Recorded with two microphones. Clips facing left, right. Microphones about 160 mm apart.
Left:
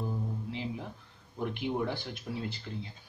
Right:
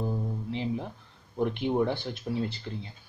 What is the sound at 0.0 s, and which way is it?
Music, 30° right (ahead or behind).